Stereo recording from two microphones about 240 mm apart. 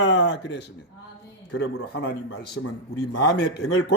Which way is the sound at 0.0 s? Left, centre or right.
Left.